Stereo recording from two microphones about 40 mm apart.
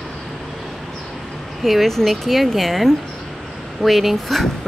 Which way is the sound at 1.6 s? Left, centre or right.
Centre.